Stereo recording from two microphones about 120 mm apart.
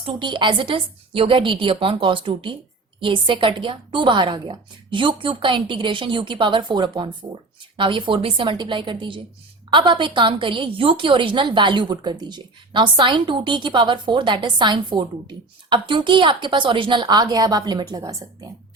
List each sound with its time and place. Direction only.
0.0 s a woman's voice: 45° right (ahead or behind)